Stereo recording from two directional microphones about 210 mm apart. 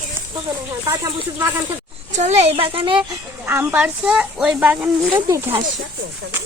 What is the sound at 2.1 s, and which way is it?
Speech, 30° right (ahead or behind).